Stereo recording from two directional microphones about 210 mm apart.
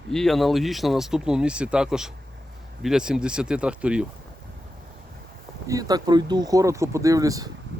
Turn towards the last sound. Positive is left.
turn(degrees=-15)  # may be behind; listen again after turning